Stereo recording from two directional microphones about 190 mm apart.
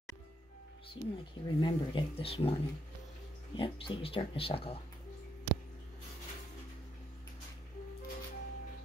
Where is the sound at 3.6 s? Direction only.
30° left (ahead or behind).